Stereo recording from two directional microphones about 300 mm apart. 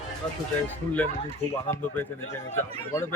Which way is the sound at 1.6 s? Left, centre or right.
Centre.